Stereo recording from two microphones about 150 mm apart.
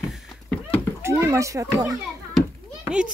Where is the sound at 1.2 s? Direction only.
20° right (ahead or behind).